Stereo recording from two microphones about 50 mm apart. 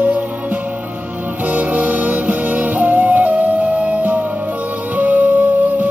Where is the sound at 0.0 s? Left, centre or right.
Right.